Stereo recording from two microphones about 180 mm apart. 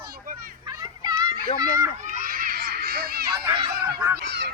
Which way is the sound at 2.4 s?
60° right (ahead or behind).